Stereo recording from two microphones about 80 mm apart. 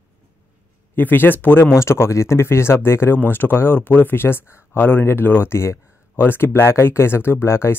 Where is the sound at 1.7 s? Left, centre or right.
Left.